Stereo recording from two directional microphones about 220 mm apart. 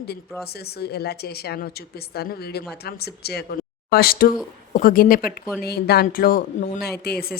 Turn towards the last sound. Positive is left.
turn(degrees=45)  # may be behind; listen again after turning